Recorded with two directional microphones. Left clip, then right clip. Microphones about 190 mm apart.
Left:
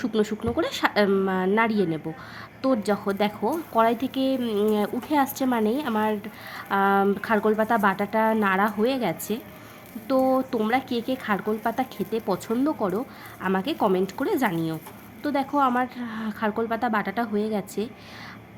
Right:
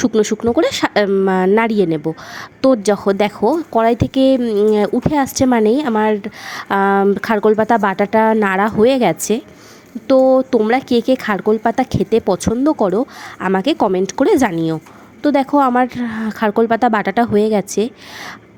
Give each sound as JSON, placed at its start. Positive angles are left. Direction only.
{"t": 0.0, "sound": "speech", "side_deg": -35}
{"t": 4.4, "sound": "speech", "side_deg": -20}